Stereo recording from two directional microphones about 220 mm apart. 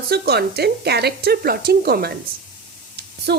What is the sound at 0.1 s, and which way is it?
A woman's voice, 45° right (ahead or behind).